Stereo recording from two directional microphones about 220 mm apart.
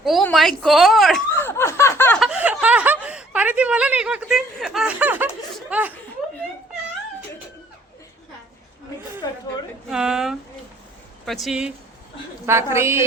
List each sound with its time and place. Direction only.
0.0 s speech: centre (ahead or behind)
1.3 s snicker: 10° left (ahead or behind)
2.2 s snicker: 5° right (ahead or behind)
9.2 s a sound: 15° left (ahead or behind)
9.9 s a sound: 5° right (ahead or behind)
11.3 s a woman's voice: centre (ahead or behind)